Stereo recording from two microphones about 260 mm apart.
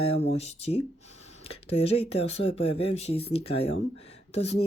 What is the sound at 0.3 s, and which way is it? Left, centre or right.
Speech, left.